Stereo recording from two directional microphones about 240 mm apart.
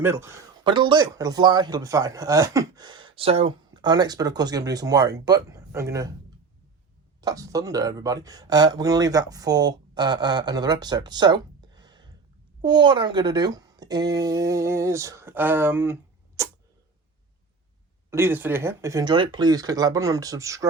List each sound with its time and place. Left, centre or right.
0.0 s speech: centre
7.2 s speech: centre
16.4 s a sound: centre
18.1 s speech: centre